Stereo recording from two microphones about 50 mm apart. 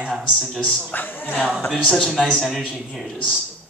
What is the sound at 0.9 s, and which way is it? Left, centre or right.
Speech, left.